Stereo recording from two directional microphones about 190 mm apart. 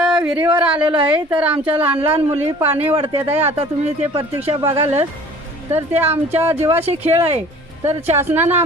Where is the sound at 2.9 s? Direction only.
30° right (ahead or behind).